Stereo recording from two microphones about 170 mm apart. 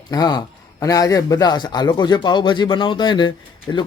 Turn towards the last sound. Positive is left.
turn(degrees=25)  # may be behind; listen again after turning